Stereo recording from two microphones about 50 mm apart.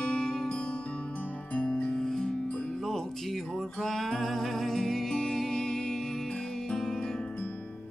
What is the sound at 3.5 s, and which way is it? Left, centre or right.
Music, centre.